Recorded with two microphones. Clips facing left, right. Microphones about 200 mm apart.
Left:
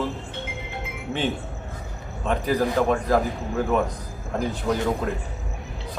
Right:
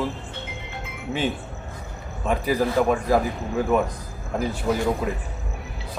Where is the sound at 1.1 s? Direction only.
Centre (ahead or behind).